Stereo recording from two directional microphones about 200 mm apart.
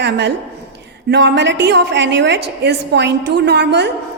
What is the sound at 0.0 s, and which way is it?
A woman's voice, 60° right (ahead or behind).